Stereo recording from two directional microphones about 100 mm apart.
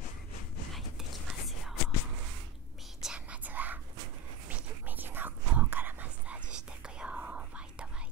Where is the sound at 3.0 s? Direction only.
10° right (ahead or behind).